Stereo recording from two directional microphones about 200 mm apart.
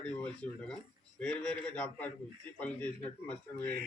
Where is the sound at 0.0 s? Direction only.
5° left (ahead or behind).